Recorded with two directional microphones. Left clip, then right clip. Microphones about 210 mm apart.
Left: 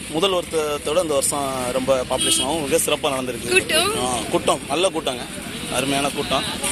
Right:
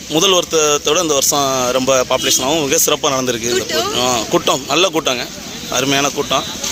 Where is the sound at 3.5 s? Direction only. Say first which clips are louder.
Left 3 dB; centre (ahead or behind).